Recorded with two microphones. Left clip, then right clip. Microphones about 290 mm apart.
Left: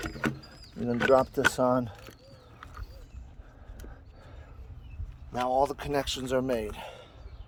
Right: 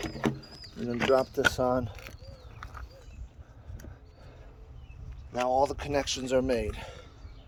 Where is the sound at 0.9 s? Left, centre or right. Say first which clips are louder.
Left 2 dB; left.